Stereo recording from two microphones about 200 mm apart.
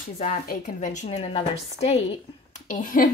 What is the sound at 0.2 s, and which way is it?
Speech, 40° left (ahead or behind).